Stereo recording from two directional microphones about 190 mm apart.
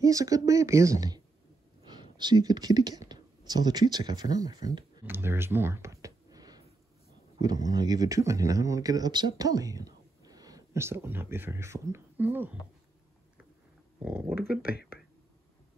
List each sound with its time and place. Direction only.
0.0 s speech: 20° right (ahead or behind)
5.0 s a sound: 10° right (ahead or behind)
7.3 s speech: 20° right (ahead or behind)
13.9 s speech: 10° right (ahead or behind)